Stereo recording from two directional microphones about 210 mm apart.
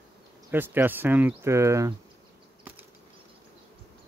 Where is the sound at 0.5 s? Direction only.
10° right (ahead or behind).